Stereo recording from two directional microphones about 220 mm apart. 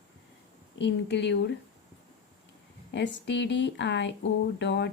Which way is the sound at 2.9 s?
55° left (ahead or behind).